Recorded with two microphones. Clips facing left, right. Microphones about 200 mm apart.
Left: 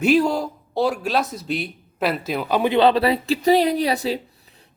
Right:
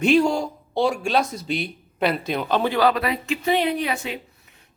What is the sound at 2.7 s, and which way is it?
Speech, 30° left (ahead or behind).